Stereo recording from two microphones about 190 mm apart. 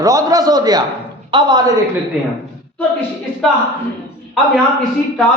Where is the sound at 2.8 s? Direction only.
5° left (ahead or behind).